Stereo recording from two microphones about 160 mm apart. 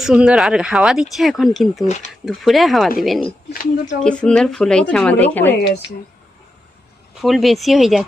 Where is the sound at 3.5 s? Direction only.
60° left (ahead or behind).